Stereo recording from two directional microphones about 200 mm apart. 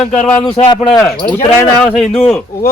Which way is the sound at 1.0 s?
5° left (ahead or behind).